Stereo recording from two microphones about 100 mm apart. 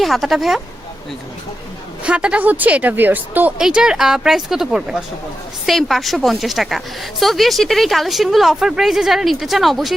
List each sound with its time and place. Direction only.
0.0 s a woman's voice: centre (ahead or behind)
2.0 s a woman's voice: 10° right (ahead or behind)